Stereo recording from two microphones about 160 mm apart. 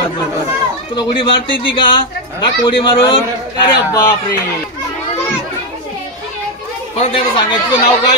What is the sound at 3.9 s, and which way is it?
Speech, 20° left (ahead or behind).